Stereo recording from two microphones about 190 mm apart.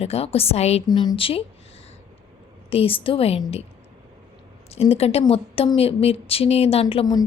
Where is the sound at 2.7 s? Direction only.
30° left (ahead or behind).